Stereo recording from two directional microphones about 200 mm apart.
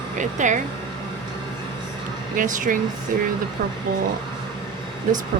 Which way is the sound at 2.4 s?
40° right (ahead or behind).